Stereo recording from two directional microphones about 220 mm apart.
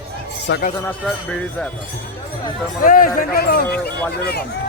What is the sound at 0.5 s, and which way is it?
Speech, 55° left (ahead or behind).